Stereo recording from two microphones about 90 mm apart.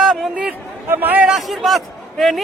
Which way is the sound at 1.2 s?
Centre (ahead or behind).